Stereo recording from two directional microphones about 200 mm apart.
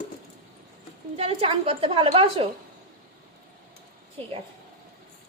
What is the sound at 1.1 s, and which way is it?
A woman's voice, 30° right (ahead or behind).